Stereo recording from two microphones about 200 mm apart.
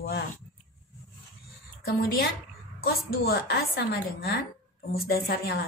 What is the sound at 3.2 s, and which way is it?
Speech, 50° left (ahead or behind).